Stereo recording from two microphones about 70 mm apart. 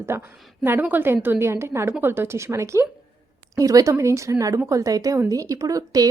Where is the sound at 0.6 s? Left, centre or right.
Right.